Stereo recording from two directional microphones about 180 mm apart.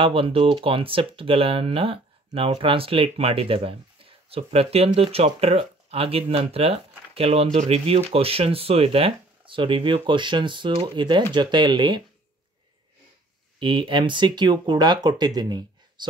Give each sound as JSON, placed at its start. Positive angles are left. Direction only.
{"t": 0.0, "sound": "speech", "side_deg": -30}
{"t": 13.6, "sound": "speech", "side_deg": -25}